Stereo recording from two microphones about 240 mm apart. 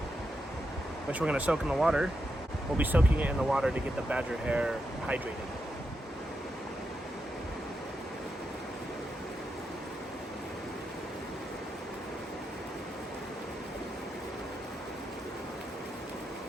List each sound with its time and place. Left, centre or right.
1.2 s speech: centre